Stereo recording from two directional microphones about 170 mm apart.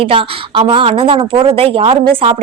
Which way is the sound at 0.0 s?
30° right (ahead or behind).